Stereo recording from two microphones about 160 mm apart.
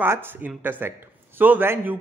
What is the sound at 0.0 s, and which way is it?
A man's voice, 15° right (ahead or behind).